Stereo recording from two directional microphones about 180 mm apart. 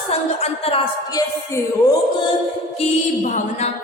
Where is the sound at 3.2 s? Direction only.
45° left (ahead or behind).